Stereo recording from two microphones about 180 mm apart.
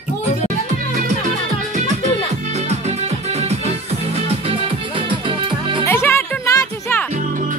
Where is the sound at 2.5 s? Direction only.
35° right (ahead or behind).